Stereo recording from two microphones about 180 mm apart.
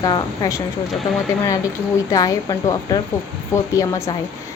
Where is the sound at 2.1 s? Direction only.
20° left (ahead or behind).